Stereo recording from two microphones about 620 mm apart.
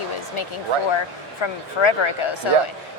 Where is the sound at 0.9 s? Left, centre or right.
Left.